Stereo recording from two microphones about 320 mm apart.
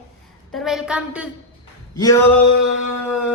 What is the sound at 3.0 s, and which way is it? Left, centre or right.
Speech, centre.